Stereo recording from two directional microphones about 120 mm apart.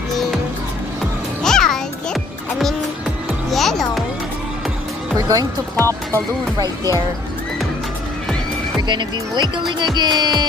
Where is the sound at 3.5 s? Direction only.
Centre (ahead or behind).